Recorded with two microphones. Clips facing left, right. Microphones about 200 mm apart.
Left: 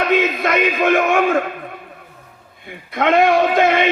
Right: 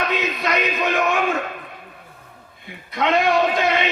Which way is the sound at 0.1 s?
50° left (ahead or behind).